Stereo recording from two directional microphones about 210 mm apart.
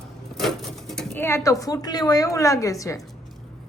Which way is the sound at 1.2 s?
10° left (ahead or behind).